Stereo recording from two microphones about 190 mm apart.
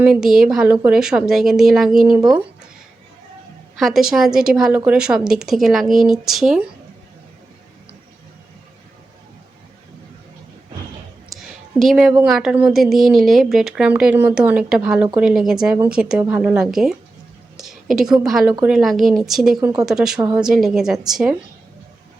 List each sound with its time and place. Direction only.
0.0 s a woman's voice: 5° right (ahead or behind)
2.1 s a woman's voice: 20° right (ahead or behind)
3.8 s a woman's voice: centre (ahead or behind)
11.3 s a sound: centre (ahead or behind)
12.2 s a woman's voice: 5° right (ahead or behind)
20.1 s a woman's voice: 20° right (ahead or behind)
20.4 s a woman's voice: centre (ahead or behind)